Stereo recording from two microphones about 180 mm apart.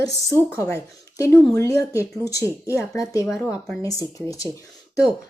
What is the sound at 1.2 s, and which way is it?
A woman's voice, 15° left (ahead or behind).